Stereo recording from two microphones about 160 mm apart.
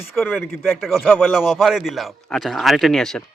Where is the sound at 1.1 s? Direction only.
5° right (ahead or behind).